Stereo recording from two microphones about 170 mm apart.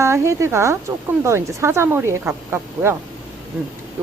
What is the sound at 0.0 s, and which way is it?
Speech, 15° right (ahead or behind).